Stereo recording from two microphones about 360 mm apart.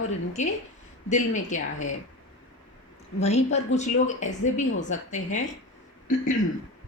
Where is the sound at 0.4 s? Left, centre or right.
Centre.